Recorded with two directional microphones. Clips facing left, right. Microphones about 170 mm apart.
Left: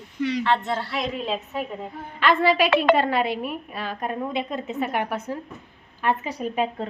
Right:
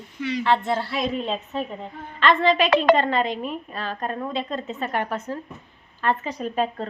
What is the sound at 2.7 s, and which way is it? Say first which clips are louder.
Speech: right 4 dB; 40° right (ahead or behind).